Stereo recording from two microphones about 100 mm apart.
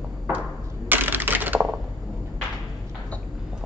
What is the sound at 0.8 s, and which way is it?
Typewriter, 20° right (ahead or behind).